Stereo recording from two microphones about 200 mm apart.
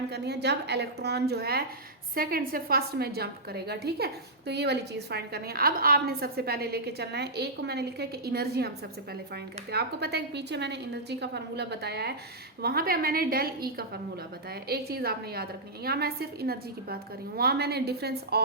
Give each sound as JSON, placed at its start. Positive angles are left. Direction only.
{"t": 0.1, "sound": "a woman's voice", "side_deg": -55}